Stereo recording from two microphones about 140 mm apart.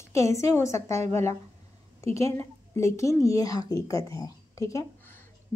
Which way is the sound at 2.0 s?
45° right (ahead or behind).